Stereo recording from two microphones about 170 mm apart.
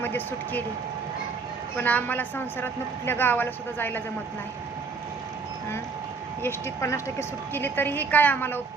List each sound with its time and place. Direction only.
0.0 s speech: 10° left (ahead or behind)
1.7 s a woman's voice: 10° left (ahead or behind)
6.4 s a woman's voice: 15° left (ahead or behind)